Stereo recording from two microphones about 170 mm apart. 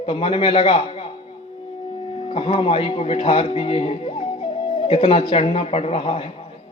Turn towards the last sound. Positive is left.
turn(degrees=35)  # may be behind; listen again after turning